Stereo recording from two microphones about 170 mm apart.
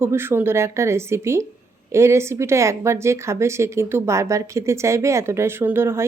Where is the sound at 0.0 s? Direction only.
15° right (ahead or behind).